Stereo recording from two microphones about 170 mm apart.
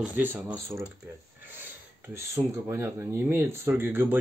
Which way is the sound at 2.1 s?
15° right (ahead or behind).